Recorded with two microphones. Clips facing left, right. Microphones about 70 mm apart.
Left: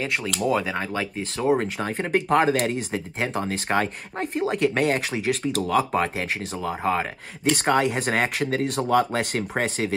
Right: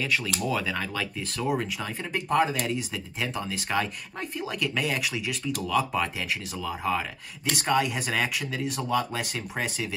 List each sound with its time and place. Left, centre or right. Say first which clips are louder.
0.5 s speech: left 6 dB; left
1.6 s speech: left 6 dB; left